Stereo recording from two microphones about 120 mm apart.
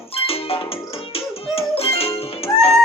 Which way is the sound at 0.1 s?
55° left (ahead or behind).